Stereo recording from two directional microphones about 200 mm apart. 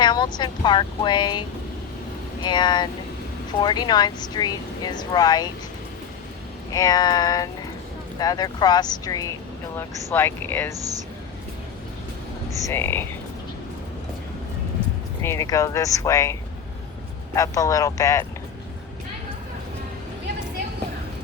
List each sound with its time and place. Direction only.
0.0 s speech: 20° left (ahead or behind)
6.7 s speech: 15° left (ahead or behind)
10.8 s speech: 15° right (ahead or behind)
12.6 s speech: 10° left (ahead or behind)
15.2 s speech: 15° left (ahead or behind)